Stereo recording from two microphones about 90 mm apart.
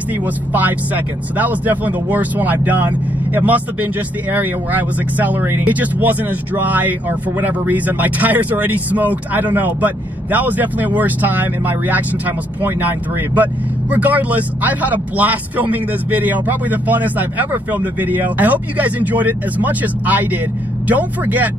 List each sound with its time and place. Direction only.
0.5 s a man's voice: 20° right (ahead or behind)